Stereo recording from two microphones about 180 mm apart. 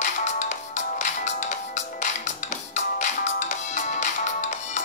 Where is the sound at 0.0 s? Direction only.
40° left (ahead or behind).